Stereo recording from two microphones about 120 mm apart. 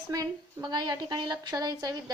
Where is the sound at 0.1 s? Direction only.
30° right (ahead or behind).